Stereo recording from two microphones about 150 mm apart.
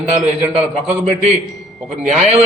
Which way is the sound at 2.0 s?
45° right (ahead or behind).